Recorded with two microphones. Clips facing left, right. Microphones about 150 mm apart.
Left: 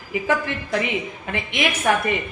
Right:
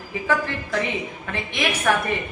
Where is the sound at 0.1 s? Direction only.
15° left (ahead or behind).